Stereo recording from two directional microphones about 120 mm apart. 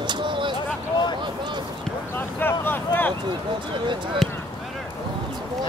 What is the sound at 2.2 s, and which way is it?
Vehicle, 15° left (ahead or behind).